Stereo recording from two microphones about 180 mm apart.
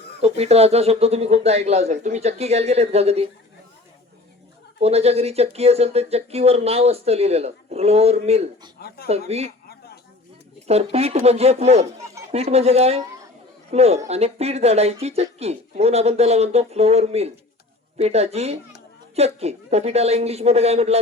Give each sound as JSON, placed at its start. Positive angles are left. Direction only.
{"t": 0.2, "sound": "speech", "side_deg": -35}
{"t": 4.8, "sound": "speech", "side_deg": -35}
{"t": 9.6, "sound": "a sound", "side_deg": 60}
{"t": 10.7, "sound": "a man's voice", "side_deg": -35}